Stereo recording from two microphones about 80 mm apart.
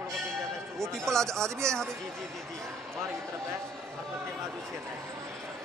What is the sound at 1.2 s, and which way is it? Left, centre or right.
Speech, right.